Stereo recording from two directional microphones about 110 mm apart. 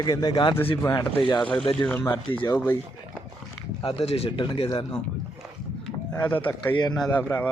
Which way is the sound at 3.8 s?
60° left (ahead or behind).